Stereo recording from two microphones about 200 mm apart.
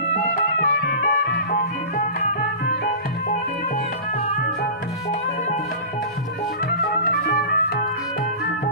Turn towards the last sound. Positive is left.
turn(degrees=50)  # may be behind; listen again after turning